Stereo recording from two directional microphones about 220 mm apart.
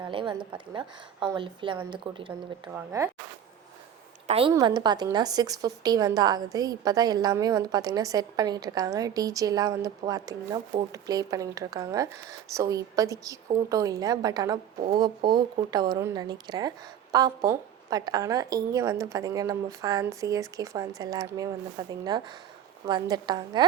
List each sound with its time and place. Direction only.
0.0 s a woman's voice: 20° right (ahead or behind)
4.3 s a woman's voice: 25° right (ahead or behind)